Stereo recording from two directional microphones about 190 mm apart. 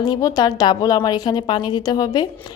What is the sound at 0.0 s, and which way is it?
A woman's voice, 20° left (ahead or behind).